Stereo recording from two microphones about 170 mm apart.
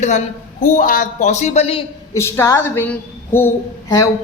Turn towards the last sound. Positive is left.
turn(degrees=20)  # may be behind; listen again after turning